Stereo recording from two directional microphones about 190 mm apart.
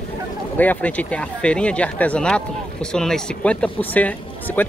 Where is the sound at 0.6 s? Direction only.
10° left (ahead or behind).